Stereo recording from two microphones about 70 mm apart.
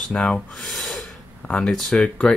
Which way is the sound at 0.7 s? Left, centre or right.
Centre.